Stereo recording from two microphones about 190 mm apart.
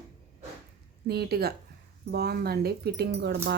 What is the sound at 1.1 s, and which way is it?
A woman's voice, 55° right (ahead or behind).